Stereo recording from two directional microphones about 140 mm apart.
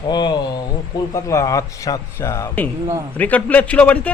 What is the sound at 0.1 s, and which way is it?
A man's voice, 30° left (ahead or behind).